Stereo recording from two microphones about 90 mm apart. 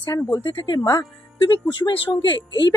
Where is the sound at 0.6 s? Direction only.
50° left (ahead or behind).